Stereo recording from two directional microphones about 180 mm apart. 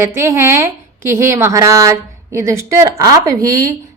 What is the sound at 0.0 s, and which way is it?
A woman's voice, 15° right (ahead or behind).